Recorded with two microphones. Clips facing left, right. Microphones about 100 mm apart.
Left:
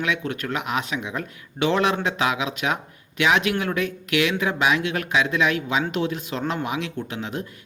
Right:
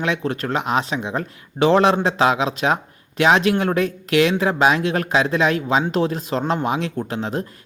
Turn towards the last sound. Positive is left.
turn(degrees=-35)  # may be behind; listen again after turning